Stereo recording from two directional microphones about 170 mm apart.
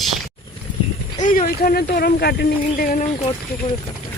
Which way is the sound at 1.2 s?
55° left (ahead or behind).